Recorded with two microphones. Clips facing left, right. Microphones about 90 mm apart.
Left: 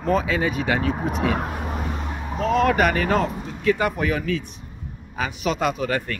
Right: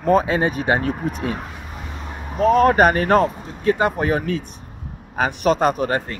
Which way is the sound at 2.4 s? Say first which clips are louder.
Right 5 dB; 45° right (ahead or behind).